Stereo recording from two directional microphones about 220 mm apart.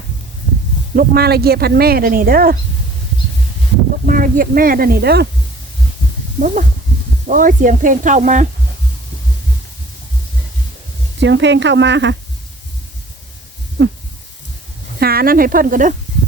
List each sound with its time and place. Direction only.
0.9 s speech: 45° right (ahead or behind)
4.0 s speech: 40° right (ahead or behind)
6.4 s speech: 35° right (ahead or behind)
11.2 s speech: 55° right (ahead or behind)
14.9 s speech: 45° right (ahead or behind)